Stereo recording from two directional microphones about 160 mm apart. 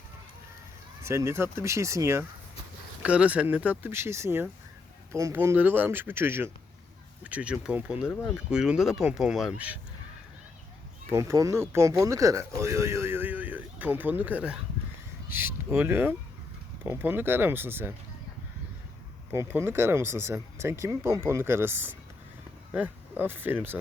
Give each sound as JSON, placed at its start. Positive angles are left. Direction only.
{"t": 1.0, "sound": "speech", "side_deg": -15}
{"t": 3.0, "sound": "speech", "side_deg": -5}
{"t": 11.1, "sound": "speech", "side_deg": -20}
{"t": 19.3, "sound": "speech", "side_deg": -15}